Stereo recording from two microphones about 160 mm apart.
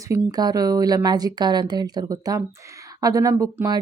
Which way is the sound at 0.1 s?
25° right (ahead or behind).